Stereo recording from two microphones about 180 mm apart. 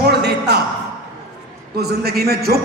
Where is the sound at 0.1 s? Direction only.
65° right (ahead or behind).